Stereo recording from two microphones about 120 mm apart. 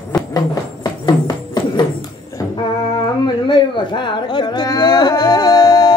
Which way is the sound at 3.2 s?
40° left (ahead or behind).